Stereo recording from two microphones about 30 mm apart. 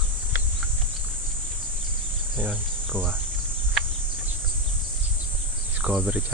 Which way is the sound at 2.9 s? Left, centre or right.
Right.